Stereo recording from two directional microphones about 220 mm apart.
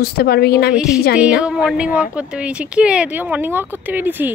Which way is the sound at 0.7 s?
5° right (ahead or behind).